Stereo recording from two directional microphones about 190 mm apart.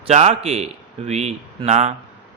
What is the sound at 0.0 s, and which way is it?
A man's voice, 35° right (ahead or behind).